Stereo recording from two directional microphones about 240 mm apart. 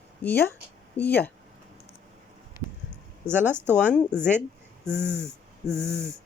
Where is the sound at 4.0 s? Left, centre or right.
Centre.